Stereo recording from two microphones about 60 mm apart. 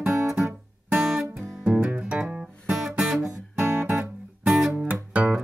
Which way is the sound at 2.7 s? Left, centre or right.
Centre.